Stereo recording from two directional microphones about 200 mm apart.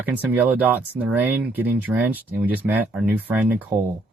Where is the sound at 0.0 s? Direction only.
10° right (ahead or behind).